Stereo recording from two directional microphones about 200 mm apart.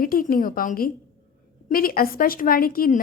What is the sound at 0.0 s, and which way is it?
Speech, 45° left (ahead or behind).